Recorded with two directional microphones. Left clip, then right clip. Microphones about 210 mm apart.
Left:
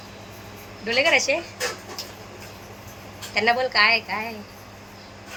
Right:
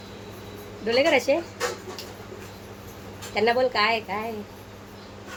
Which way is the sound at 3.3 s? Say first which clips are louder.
Left 1 dB; 20° right (ahead or behind).